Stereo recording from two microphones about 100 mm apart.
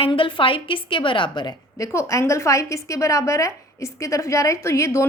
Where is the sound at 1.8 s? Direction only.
30° left (ahead or behind).